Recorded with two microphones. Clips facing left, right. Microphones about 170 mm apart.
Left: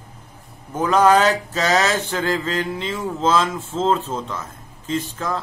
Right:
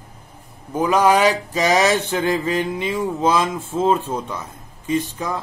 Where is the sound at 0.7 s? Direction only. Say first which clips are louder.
Left 1 dB; 10° right (ahead or behind).